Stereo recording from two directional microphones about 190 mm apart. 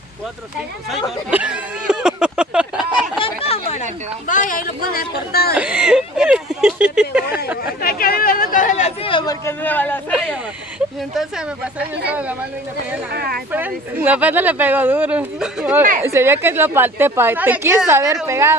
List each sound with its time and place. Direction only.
0.8 s speech: 5° right (ahead or behind)
3.2 s speech: 30° left (ahead or behind); by 5.5 s 55° left (ahead or behind)
5.6 s a sound: 5° right (ahead or behind)
7.8 s speech: 50° left (ahead or behind); by 10.1 s 10° left (ahead or behind)
10.1 s a woman's voice: 5° right (ahead or behind)
13.1 s speech: 55° right (ahead or behind)
13.5 s a woman's voice: 10° right (ahead or behind)